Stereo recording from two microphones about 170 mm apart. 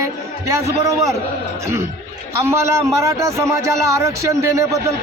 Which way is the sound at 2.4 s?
15° right (ahead or behind).